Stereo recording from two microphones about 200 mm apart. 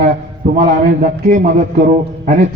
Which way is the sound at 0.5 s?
40° right (ahead or behind).